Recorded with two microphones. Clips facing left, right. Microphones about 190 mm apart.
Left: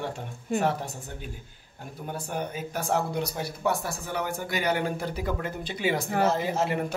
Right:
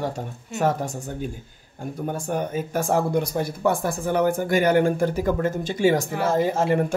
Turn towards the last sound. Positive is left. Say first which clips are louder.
# right 6 dB
turn(degrees=-50)  # may be behind; listen again after turning